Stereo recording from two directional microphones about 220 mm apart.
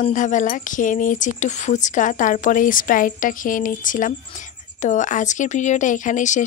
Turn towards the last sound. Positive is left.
turn(degrees=35)  # may be behind; listen again after turning